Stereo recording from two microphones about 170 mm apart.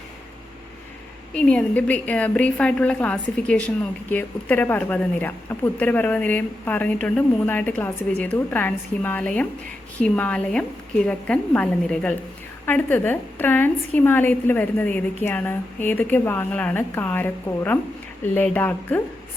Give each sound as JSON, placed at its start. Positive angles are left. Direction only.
{"t": 1.3, "sound": "speech", "side_deg": 5}